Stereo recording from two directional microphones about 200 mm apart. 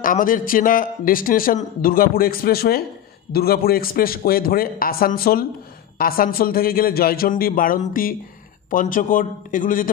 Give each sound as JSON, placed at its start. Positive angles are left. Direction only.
{"t": 0.0, "sound": "speech", "side_deg": 45}